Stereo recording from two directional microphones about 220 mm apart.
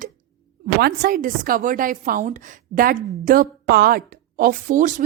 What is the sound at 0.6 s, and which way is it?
A woman's voice, 45° right (ahead or behind).